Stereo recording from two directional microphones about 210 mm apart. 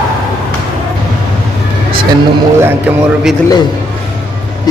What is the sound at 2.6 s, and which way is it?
Speech, 10° right (ahead or behind).